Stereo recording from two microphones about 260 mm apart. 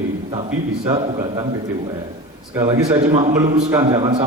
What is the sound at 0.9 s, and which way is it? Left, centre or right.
Speech, centre.